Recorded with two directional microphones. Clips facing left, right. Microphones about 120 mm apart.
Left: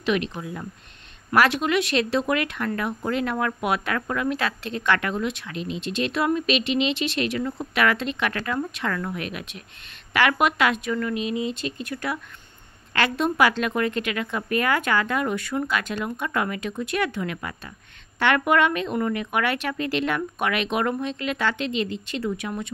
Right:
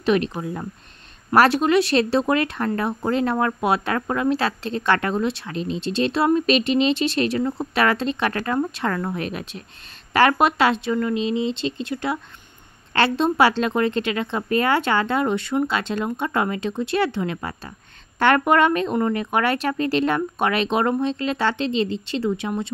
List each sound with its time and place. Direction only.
0.0 s a woman's voice: 40° right (ahead or behind)